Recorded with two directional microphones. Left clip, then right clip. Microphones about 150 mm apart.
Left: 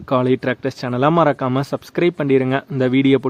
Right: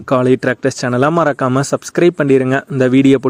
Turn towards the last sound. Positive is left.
turn(degrees=-35)  # may be behind; listen again after turning